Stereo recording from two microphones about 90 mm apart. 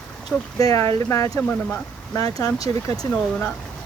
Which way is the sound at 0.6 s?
40° left (ahead or behind).